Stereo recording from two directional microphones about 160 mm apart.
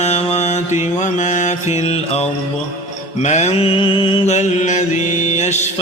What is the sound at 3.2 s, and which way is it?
Mantra, 45° left (ahead or behind).